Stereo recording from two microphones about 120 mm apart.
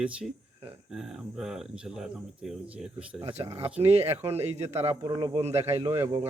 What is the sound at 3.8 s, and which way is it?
Speech, 60° right (ahead or behind).